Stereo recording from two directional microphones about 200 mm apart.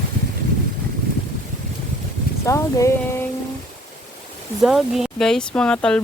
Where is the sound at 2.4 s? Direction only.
15° left (ahead or behind).